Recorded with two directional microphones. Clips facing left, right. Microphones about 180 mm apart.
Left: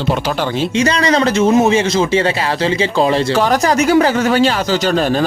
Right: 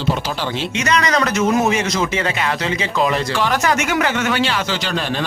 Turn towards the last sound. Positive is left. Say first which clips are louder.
# left 7 dB
turn(degrees=40)  # may be behind; listen again after turning